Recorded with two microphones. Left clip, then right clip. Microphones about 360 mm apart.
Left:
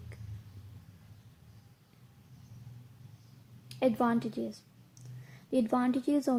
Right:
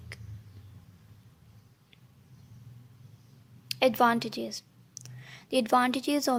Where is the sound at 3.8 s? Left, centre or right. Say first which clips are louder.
Right 6 dB; right.